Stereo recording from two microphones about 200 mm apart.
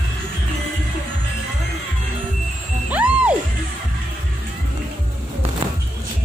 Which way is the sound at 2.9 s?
5° right (ahead or behind).